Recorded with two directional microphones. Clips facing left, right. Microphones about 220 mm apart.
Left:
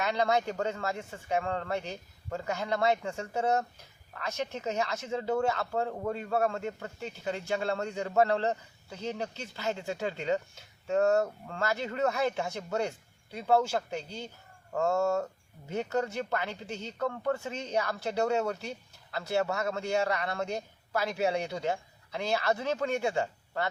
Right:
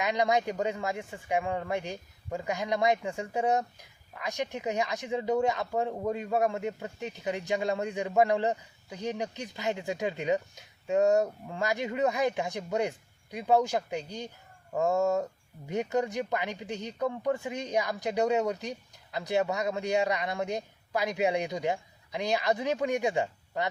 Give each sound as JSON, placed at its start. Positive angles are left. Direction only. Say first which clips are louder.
{"t": 0.0, "sound": "speech", "louder": "right 1 dB", "side_deg": -15}